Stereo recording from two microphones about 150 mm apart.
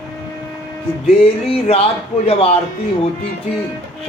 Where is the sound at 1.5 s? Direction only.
40° left (ahead or behind).